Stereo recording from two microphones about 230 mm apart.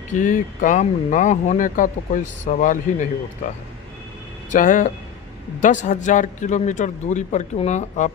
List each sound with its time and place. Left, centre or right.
0.1 s a man's voice: left